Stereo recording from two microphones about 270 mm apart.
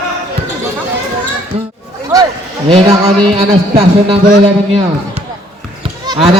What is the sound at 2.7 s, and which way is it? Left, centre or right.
Speech, right.